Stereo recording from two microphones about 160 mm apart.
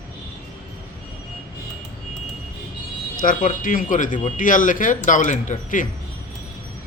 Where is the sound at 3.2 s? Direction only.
60° left (ahead or behind).